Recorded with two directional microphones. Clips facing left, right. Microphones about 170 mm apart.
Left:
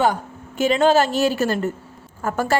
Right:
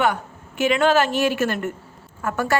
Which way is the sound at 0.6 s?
40° left (ahead or behind).